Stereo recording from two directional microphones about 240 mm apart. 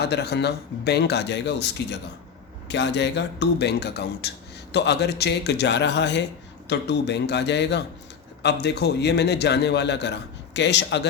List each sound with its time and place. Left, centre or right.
0.0 s a man's voice: left